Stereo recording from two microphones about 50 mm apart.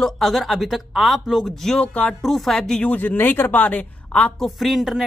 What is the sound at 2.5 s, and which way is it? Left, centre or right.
Speech, centre.